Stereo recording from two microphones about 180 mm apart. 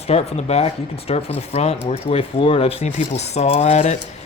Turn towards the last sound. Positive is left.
turn(degrees=40)  # may be behind; listen again after turning